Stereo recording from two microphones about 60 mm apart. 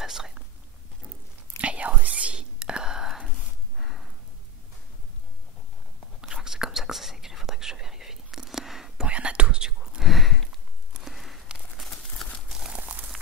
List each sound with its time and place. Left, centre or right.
0.0 s whispering: centre
1.6 s whispering: right
6.2 s whispering: centre
9.0 s whispering: centre
11.0 s a sound: centre
11.9 s clip-clop: centre
12.4 s clip-clop: centre